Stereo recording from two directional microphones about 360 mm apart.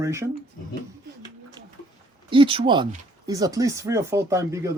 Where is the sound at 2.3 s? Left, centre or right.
Centre.